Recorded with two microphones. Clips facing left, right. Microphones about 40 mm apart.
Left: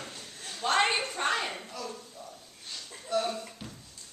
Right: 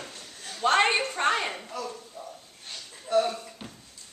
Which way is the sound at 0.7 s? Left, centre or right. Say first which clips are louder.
Right 3 dB; centre.